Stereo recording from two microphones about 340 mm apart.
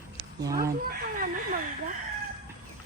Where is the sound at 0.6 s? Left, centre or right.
Right.